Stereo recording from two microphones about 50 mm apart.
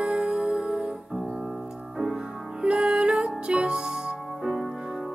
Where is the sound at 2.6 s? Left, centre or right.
Centre.